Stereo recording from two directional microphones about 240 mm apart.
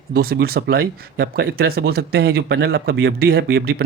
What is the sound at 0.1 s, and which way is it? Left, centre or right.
Speech, right.